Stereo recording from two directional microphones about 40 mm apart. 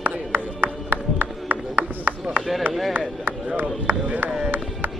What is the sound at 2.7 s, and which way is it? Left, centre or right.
Chop, right.